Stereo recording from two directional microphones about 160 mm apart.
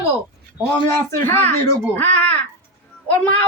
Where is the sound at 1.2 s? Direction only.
15° left (ahead or behind).